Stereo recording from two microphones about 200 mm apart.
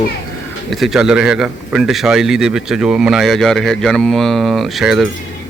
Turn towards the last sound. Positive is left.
turn(degrees=0)  # may be behind; listen again after turning